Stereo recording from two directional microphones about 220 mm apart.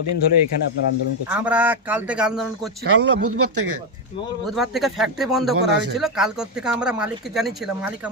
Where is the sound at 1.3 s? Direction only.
5° right (ahead or behind).